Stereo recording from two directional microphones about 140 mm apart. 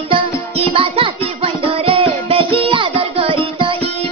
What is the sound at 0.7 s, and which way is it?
Music, 45° right (ahead or behind).